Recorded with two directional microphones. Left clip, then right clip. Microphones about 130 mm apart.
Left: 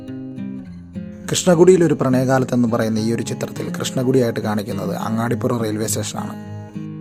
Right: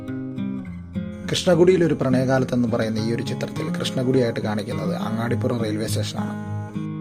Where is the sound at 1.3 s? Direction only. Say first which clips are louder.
Left 4 dB; 45° left (ahead or behind).